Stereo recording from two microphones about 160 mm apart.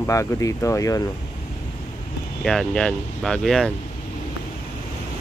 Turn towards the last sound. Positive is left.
turn(degrees=0)  # may be behind; listen again after turning